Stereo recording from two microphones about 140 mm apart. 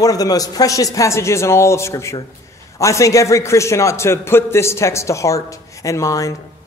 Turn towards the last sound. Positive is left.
turn(degrees=25)  # may be behind; listen again after turning